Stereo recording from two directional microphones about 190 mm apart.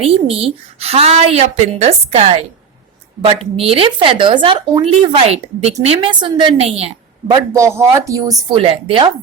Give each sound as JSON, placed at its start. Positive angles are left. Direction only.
{"t": 0.0, "sound": "speech", "side_deg": -30}
{"t": 3.5, "sound": "speech", "side_deg": -30}
{"t": 7.3, "sound": "speech", "side_deg": -15}